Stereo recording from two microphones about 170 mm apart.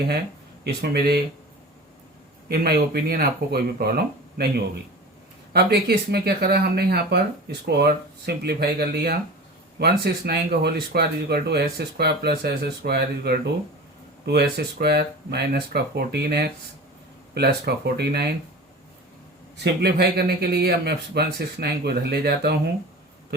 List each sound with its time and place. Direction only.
0.6 s speech: 70° right (ahead or behind)
2.5 s speech: 65° right (ahead or behind)
19.5 s speech: 80° right